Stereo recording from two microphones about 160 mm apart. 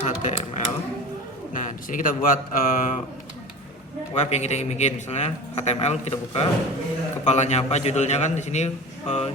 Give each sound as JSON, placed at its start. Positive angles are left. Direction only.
{"t": 0.0, "sound": "a sound", "side_deg": 50}
{"t": 1.5, "sound": "speech", "side_deg": 55}
{"t": 4.1, "sound": "a man's voice", "side_deg": 45}